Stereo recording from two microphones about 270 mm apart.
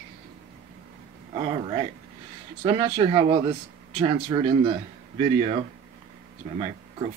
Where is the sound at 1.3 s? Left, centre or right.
Centre.